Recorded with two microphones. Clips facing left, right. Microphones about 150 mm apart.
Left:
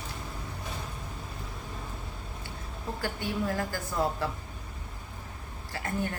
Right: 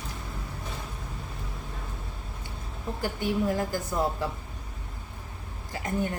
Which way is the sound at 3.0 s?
15° right (ahead or behind).